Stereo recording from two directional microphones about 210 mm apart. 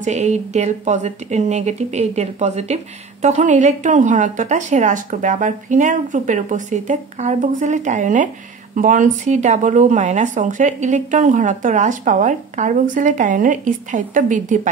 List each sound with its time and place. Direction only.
0.0 s speech: 35° right (ahead or behind)